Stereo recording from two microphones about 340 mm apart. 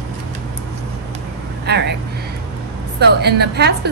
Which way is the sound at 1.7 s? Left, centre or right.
Right.